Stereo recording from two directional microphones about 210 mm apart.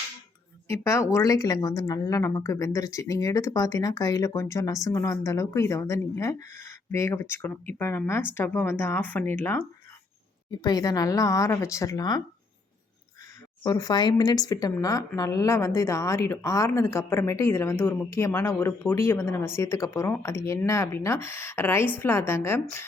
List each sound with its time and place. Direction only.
0.7 s speech: 15° left (ahead or behind)
13.6 s speech: 15° left (ahead or behind)